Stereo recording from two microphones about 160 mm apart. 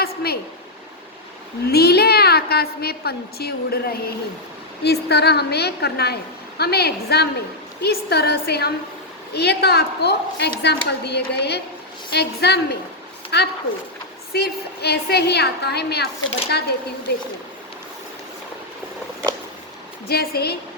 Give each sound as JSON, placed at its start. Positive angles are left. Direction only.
{"t": 0.0, "sound": "a sound", "side_deg": 75}
{"t": 1.6, "sound": "a woman's voice", "side_deg": 80}
{"t": 4.8, "sound": "a woman's voice", "side_deg": 90}
{"t": 20.1, "sound": "a woman's voice", "side_deg": 85}